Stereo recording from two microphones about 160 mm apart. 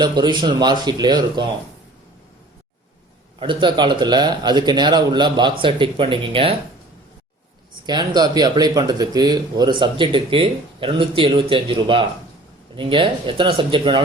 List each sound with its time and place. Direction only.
0.0 s speech: 25° right (ahead or behind)
3.4 s speech: 30° right (ahead or behind)
7.9 s speech: 25° right (ahead or behind)